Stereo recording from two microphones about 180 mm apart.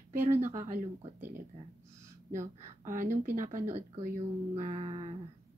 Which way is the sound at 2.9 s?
50° right (ahead or behind).